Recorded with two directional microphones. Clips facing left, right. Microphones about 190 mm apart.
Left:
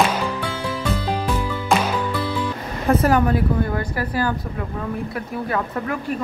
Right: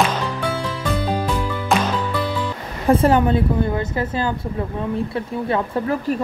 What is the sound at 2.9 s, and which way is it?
A woman's voice, 25° right (ahead or behind).